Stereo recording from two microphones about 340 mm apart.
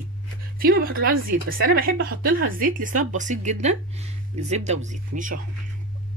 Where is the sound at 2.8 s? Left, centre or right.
Right.